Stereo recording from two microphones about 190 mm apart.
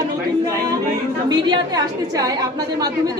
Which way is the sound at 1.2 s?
20° right (ahead or behind).